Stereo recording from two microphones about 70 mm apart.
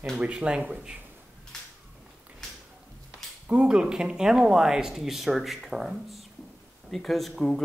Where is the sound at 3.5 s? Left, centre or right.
Centre.